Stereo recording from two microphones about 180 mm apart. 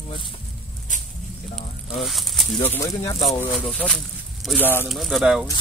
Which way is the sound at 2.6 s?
15° left (ahead or behind).